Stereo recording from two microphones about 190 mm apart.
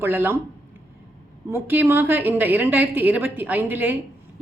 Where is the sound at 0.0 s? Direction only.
10° right (ahead or behind).